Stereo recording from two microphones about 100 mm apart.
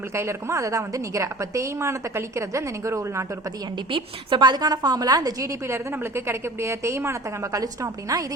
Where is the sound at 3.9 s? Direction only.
55° right (ahead or behind).